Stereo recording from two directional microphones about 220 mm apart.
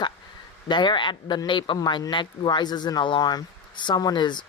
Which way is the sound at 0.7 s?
20° left (ahead or behind).